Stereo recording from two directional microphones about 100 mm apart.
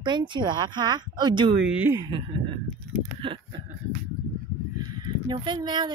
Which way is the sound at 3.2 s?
60° right (ahead or behind).